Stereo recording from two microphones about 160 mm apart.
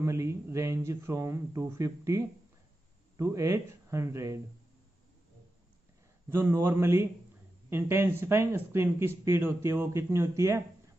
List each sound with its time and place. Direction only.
0.0 s speech: 20° right (ahead or behind)
6.3 s speech: 15° right (ahead or behind)